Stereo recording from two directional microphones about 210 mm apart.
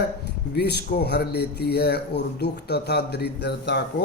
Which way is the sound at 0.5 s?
50° left (ahead or behind).